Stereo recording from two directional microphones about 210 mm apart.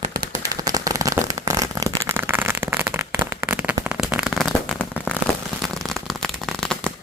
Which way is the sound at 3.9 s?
5° right (ahead or behind).